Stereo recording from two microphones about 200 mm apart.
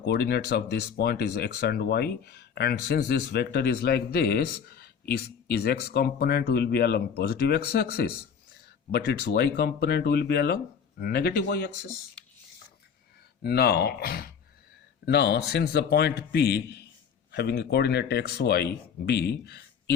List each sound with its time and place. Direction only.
0.0 s speech: 50° left (ahead or behind)
13.4 s speech: 50° left (ahead or behind)